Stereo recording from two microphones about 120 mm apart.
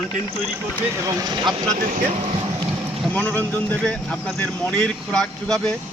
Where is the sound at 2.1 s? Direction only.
55° right (ahead or behind).